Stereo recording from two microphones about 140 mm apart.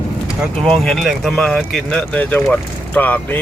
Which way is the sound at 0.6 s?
5° left (ahead or behind).